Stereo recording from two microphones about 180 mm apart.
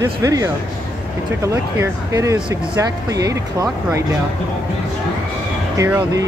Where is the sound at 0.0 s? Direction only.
20° right (ahead or behind).